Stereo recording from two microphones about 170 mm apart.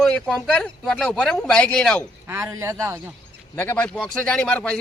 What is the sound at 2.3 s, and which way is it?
Speech, 15° right (ahead or behind).